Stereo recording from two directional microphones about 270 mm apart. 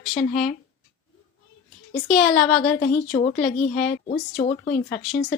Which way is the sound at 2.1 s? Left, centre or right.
Centre.